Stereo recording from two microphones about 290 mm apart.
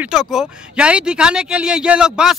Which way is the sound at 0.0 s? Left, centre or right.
Centre.